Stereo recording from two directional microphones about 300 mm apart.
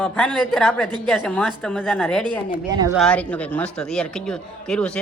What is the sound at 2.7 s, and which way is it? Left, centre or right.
Speech, centre.